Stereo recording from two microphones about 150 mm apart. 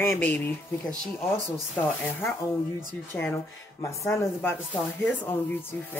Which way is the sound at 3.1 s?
15° left (ahead or behind).